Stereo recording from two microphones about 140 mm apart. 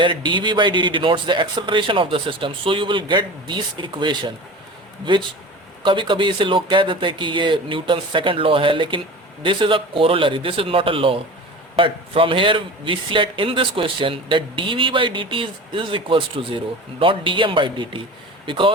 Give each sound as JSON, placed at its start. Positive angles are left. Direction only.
{"t": 0.0, "sound": "a man's voice", "side_deg": -35}
{"t": 5.8, "sound": "a man's voice", "side_deg": -35}